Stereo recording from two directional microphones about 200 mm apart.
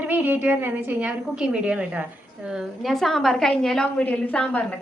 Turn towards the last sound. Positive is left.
turn(degrees=5)  # may be behind; listen again after turning